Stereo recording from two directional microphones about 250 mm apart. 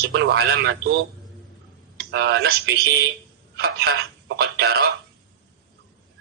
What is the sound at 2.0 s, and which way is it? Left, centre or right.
Speech, right.